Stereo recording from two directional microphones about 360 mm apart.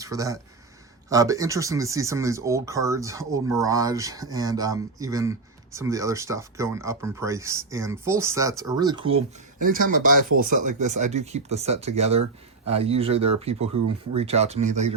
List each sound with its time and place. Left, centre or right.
0.0 s speech: centre
13.7 s speech: right
14.3 s speech: centre